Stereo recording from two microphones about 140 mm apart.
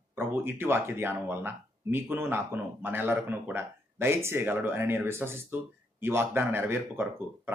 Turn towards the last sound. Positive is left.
turn(degrees=-15)  # may be behind; listen again after turning